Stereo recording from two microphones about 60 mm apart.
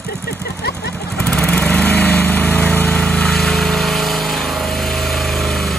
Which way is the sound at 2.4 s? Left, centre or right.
Centre.